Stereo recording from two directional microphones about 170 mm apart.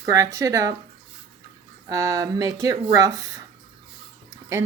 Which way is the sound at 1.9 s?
20° right (ahead or behind).